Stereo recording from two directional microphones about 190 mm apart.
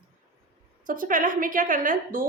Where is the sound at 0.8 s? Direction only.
45° right (ahead or behind).